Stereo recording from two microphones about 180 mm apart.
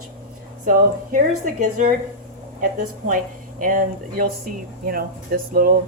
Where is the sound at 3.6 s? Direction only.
50° right (ahead or behind).